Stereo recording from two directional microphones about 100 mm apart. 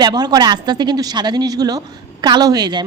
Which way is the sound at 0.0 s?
40° right (ahead or behind).